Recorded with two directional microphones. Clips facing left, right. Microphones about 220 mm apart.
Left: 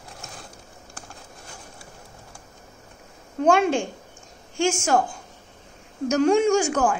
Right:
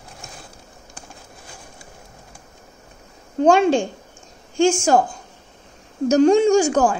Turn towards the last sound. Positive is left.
turn(degrees=-30)  # may be behind; listen again after turning